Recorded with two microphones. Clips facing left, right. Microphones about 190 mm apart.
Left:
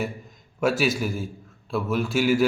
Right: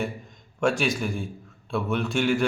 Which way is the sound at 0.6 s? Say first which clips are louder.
Left 1 dB; 5° left (ahead or behind).